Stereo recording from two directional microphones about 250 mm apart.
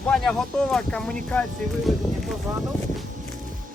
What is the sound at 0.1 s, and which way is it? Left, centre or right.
Speech, centre.